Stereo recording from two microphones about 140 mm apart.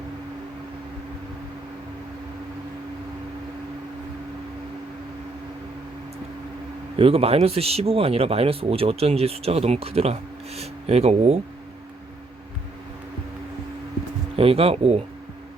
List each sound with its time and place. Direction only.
7.0 s speech: 45° right (ahead or behind)
14.3 s speech: 45° right (ahead or behind)